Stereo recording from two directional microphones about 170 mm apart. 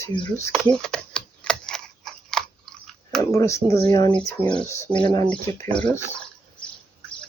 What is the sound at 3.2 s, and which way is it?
Speech, 15° left (ahead or behind).